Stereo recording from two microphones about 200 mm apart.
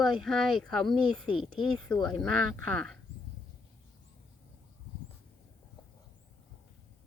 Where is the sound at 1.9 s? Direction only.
20° left (ahead or behind).